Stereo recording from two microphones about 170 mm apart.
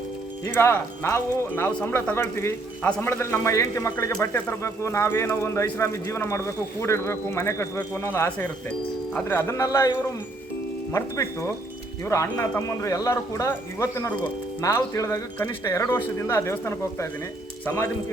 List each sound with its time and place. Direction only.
0.4 s speech: 15° left (ahead or behind)
10.9 s speech: 15° left (ahead or behind)